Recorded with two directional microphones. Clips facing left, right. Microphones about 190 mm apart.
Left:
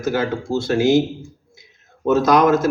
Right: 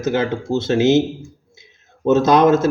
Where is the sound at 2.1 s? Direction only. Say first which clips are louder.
Right 2 dB; 25° right (ahead or behind).